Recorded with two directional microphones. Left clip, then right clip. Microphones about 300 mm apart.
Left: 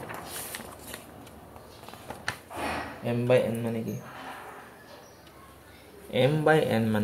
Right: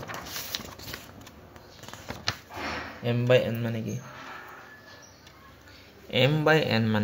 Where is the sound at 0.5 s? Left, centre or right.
Right.